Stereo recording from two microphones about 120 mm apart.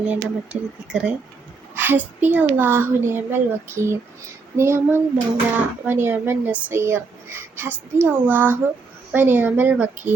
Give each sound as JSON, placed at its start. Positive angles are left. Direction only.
{"t": 0.0, "sound": "a child's voice", "side_deg": -10}